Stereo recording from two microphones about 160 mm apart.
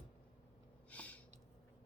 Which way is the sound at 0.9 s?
10° left (ahead or behind).